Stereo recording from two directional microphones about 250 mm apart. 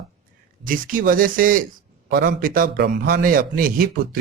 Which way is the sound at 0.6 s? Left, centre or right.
Right.